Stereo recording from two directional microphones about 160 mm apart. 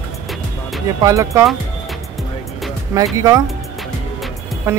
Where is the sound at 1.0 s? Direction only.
20° right (ahead or behind).